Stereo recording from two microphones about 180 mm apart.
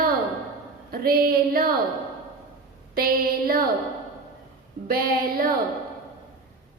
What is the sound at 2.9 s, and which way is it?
Speech, 55° right (ahead or behind).